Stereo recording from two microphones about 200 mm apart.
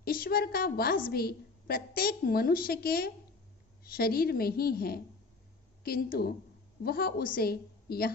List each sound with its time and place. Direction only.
0.0 s a woman's voice: 45° left (ahead or behind)